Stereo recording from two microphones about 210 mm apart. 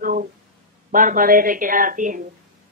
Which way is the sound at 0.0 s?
40° right (ahead or behind).